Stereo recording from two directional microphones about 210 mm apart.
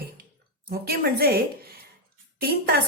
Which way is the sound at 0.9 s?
45° right (ahead or behind).